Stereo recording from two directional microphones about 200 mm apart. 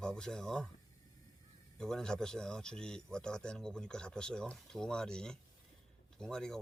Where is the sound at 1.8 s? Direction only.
5° left (ahead or behind).